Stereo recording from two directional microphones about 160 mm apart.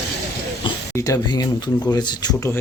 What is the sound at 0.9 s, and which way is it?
Speech, 20° left (ahead or behind).